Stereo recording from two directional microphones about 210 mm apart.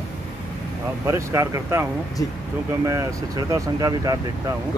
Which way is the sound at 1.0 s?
15° right (ahead or behind).